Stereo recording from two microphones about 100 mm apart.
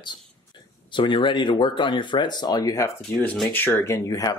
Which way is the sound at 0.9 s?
55° left (ahead or behind).